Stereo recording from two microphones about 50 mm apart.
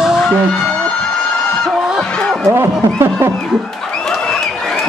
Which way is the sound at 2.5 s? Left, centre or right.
Right.